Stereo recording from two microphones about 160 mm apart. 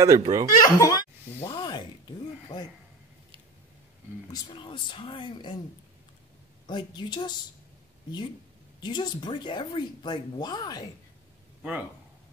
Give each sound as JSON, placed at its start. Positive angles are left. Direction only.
{"t": 0.0, "sound": "speech", "side_deg": -25}
{"t": 0.6, "sound": "speech", "side_deg": 25}
{"t": 1.4, "sound": "a sound", "side_deg": 25}
{"t": 4.3, "sound": "speech", "side_deg": 30}
{"t": 6.7, "sound": "speech", "side_deg": 30}
{"t": 8.8, "sound": "speech", "side_deg": 30}